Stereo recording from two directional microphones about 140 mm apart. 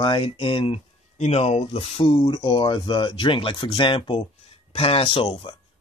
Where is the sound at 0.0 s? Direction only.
35° left (ahead or behind).